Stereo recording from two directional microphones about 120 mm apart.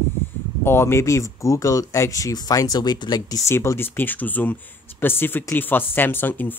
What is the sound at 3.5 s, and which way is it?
Speech, 20° left (ahead or behind).